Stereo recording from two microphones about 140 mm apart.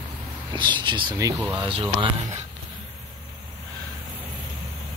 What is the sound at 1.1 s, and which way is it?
Speech, 25° right (ahead or behind).